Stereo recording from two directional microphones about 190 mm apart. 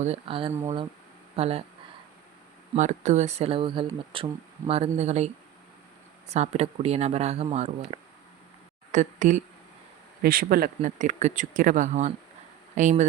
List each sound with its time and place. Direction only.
0.0 s speech: 30° right (ahead or behind)
2.7 s speech: 40° right (ahead or behind)
6.3 s a woman's voice: 35° right (ahead or behind)